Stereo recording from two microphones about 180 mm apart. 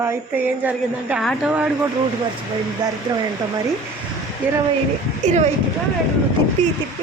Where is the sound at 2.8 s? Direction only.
20° right (ahead or behind).